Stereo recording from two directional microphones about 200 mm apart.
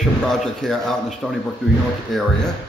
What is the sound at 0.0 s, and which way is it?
Speech, centre (ahead or behind).